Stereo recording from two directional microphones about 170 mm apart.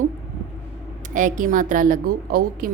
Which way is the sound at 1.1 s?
50° right (ahead or behind).